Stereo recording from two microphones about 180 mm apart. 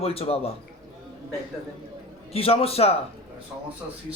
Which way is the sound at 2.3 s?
35° left (ahead or behind).